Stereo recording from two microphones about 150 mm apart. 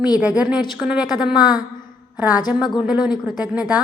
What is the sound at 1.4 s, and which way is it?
Speech, 25° left (ahead or behind).